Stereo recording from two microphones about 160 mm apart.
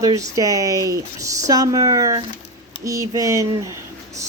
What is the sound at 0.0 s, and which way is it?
Speech, 20° right (ahead or behind).